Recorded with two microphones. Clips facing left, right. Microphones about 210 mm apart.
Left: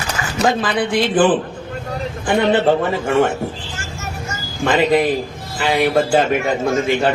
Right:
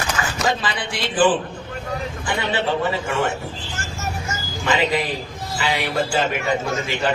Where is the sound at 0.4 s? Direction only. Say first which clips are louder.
Left 8 dB; 55° left (ahead or behind).